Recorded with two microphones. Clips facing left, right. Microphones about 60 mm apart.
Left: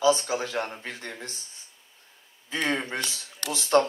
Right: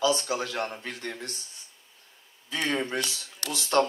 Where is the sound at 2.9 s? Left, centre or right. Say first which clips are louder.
Right 1 dB; left.